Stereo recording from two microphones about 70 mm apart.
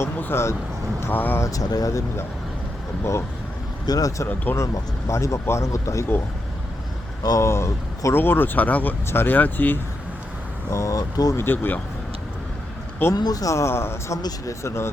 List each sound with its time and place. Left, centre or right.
0.2 s speech: left
1.4 s speech: left
3.8 s speech: left
4.5 s speech: left
7.2 s speech: left
7.4 s speech: left
10.7 s speech: left
11.3 s speech: left
13.1 s speech: left
14.2 s speech: left